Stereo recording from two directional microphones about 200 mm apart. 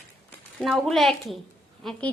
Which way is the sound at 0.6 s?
Centre (ahead or behind).